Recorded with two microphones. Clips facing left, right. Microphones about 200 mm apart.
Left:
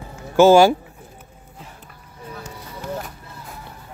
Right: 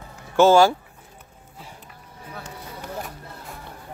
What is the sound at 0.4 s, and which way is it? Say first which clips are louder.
Speech: left 3 dB; 10° left (ahead or behind).